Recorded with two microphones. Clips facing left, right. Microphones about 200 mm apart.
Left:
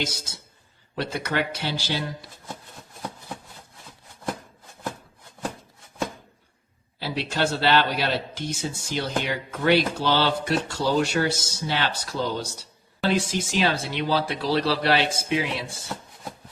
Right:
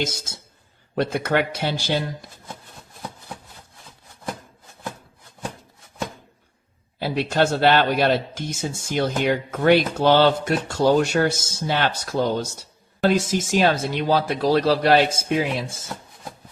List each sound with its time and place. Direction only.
0.9 s speech: 50° right (ahead or behind)
7.0 s speech: 50° right (ahead or behind)